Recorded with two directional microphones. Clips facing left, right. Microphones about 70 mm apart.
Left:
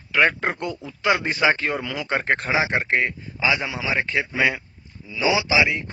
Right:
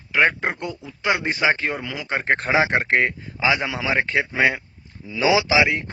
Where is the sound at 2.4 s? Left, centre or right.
Right.